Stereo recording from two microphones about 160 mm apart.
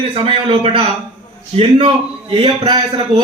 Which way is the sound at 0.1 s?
35° right (ahead or behind).